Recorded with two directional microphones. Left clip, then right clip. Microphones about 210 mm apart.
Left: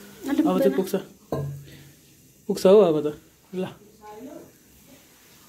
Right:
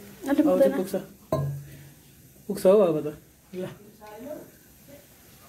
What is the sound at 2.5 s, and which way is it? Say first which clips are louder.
Speech: left 3 dB; 20° left (ahead or behind).